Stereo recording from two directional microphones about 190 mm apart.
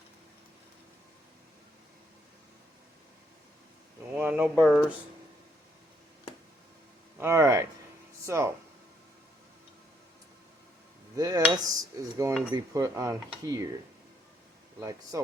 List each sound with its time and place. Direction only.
4.1 s speech: 10° right (ahead or behind)
7.2 s speech: 15° right (ahead or behind)
11.2 s dishes: 20° right (ahead or behind)
12.5 s speech: 15° right (ahead or behind)
14.8 s speech: 15° right (ahead or behind)